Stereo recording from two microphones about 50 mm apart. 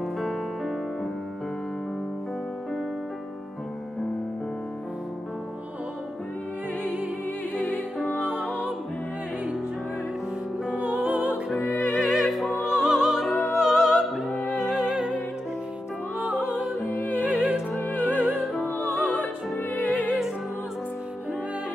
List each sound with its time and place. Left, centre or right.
6.8 s music: right
10.8 s music: right
12.0 s music: centre
12.3 s music: centre
16.2 s music: right
19.7 s music: left